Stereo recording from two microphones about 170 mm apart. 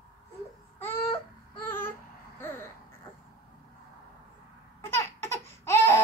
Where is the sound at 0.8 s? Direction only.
10° left (ahead or behind).